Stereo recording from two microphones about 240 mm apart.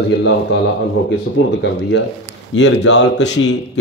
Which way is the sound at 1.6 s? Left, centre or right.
Left.